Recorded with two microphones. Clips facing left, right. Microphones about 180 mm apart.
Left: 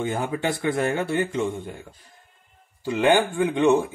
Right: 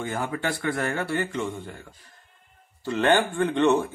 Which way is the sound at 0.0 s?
20° left (ahead or behind).